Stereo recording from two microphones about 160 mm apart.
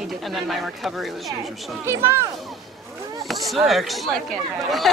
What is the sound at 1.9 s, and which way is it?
Speech, 15° right (ahead or behind).